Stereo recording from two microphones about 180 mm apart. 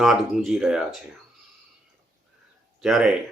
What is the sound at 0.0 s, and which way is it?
Speech, centre (ahead or behind).